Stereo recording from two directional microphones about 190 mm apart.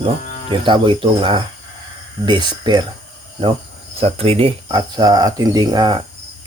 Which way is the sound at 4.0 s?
30° right (ahead or behind).